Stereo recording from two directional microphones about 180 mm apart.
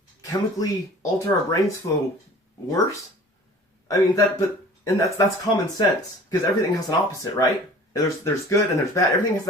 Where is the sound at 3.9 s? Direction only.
20° left (ahead or behind).